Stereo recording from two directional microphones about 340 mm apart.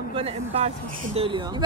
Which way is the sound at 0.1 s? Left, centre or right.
Centre.